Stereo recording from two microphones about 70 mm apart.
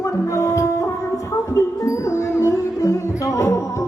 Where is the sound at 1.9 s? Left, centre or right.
Left.